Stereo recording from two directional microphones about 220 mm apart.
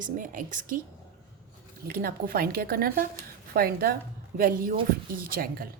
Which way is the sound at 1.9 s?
40° right (ahead or behind).